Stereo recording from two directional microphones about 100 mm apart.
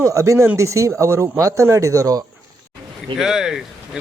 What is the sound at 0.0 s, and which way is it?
Speech, 30° right (ahead or behind).